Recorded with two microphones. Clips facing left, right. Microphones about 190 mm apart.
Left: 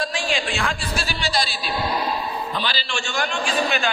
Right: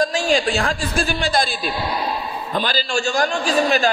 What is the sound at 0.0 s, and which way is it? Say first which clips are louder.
A man's voice: right 7 dB; 40° right (ahead or behind).